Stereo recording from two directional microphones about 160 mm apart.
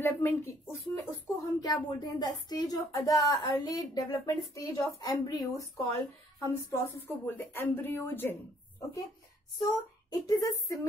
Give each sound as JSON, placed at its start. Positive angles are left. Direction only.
{"t": 0.0, "sound": "a woman's voice", "side_deg": 15}
{"t": 9.7, "sound": "a woman's voice", "side_deg": 25}